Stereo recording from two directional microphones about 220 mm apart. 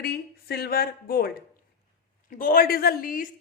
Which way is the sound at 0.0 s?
45° left (ahead or behind).